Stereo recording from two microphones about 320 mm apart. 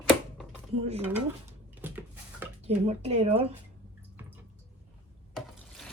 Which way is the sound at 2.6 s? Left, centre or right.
Centre.